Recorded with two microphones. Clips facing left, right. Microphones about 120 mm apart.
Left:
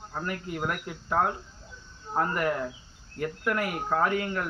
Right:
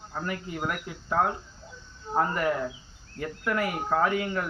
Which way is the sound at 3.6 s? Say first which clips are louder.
Right 2 dB; 10° right (ahead or behind).